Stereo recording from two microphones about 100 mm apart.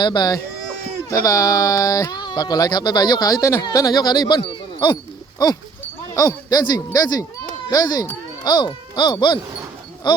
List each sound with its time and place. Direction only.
0.0 s speech: 45° left (ahead or behind)
6.1 s speech: 40° left (ahead or behind)